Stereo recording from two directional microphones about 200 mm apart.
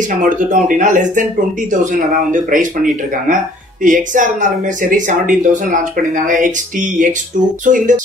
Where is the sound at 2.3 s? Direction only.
40° right (ahead or behind).